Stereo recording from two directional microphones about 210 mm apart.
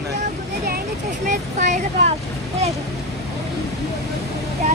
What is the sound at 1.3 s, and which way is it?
Speech, 35° right (ahead or behind).